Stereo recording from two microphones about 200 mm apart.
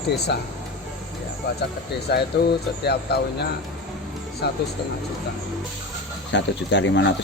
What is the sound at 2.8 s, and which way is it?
Speech, 55° left (ahead or behind).